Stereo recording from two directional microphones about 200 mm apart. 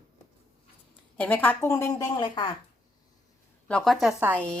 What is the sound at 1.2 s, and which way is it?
A woman's voice, 10° left (ahead or behind).